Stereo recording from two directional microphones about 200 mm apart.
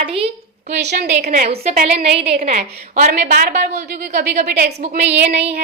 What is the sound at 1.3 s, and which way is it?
A woman's voice, 35° right (ahead or behind).